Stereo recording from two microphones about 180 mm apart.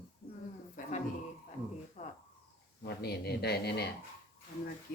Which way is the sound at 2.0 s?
40° left (ahead or behind).